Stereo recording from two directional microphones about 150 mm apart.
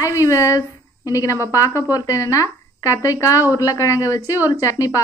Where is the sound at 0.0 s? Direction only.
20° left (ahead or behind).